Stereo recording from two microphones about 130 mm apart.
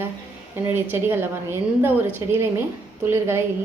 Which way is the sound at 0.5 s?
15° right (ahead or behind).